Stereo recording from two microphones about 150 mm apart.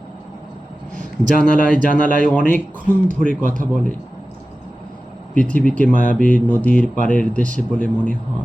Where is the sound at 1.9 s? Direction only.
60° left (ahead or behind).